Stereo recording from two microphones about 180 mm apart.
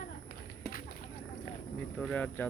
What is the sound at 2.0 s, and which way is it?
Speech, 5° left (ahead or behind).